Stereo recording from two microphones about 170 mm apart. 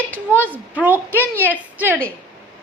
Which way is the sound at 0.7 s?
10° right (ahead or behind).